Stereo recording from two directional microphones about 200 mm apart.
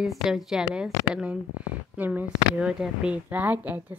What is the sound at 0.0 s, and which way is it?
A woman's voice, centre (ahead or behind).